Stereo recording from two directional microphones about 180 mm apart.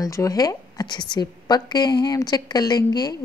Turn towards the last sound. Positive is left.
turn(degrees=20)  # may be behind; listen again after turning